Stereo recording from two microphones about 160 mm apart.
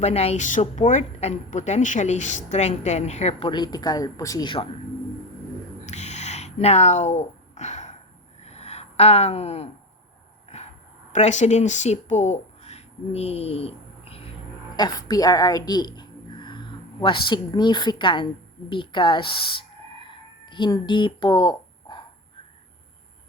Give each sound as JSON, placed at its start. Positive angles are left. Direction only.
{"t": 0.0, "sound": "a woman's voice", "side_deg": 40}
{"t": 3.5, "sound": "speech", "side_deg": 25}
{"t": 5.8, "sound": "a sound", "side_deg": 45}
{"t": 11.1, "sound": "speech", "side_deg": 45}
{"t": 14.8, "sound": "a woman's voice", "side_deg": 25}
{"t": 18.7, "sound": "a sound", "side_deg": 30}